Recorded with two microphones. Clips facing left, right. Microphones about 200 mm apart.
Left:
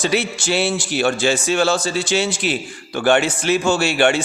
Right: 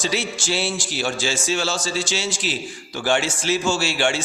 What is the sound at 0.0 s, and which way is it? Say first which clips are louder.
A man's voice: left 5 dB; 60° left (ahead or behind).